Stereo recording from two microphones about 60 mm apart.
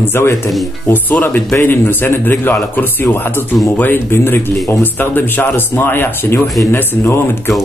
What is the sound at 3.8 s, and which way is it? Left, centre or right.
Speech, left.